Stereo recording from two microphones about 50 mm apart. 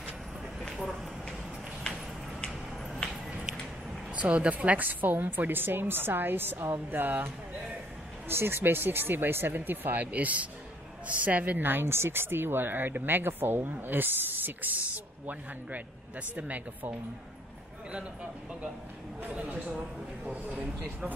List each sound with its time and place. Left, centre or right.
0.7 s a sound: centre
4.1 s a woman's voice: right
8.3 s a woman's voice: right
19.2 s a woman's voice: right